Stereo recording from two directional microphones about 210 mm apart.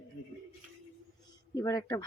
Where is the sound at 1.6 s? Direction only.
20° left (ahead or behind).